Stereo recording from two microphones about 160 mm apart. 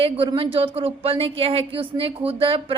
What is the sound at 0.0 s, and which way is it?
A woman's voice, 35° right (ahead or behind).